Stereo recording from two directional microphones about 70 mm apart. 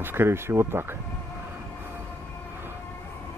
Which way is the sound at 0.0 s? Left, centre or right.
Right.